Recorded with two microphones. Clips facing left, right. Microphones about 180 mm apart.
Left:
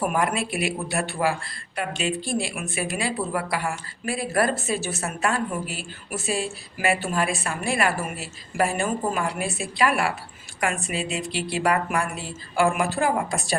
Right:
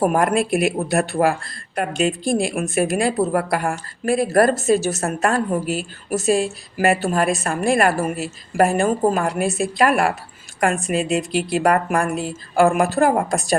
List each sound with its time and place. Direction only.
0.0 s speech: 40° right (ahead or behind)